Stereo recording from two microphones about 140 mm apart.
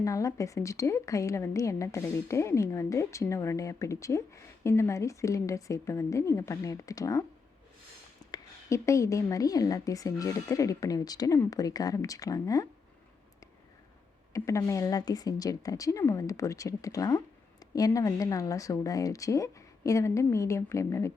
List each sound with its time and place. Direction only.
0.0 s a woman's voice: 25° left (ahead or behind)
8.3 s a woman's voice: 20° left (ahead or behind)
14.3 s a woman's voice: 20° left (ahead or behind)